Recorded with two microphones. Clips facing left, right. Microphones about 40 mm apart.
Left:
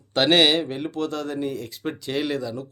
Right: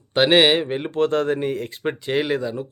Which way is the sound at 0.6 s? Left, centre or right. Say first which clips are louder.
Right 6 dB; right.